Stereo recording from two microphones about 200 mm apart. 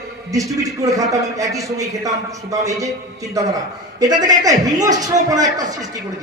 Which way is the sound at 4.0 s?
20° right (ahead or behind).